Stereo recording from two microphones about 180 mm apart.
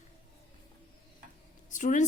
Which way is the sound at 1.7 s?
45° left (ahead or behind).